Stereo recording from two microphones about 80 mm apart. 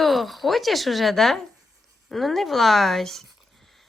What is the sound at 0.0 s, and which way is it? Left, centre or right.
A woman's voice, centre.